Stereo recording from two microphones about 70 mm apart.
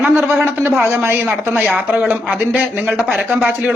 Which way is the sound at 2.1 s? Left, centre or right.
Right.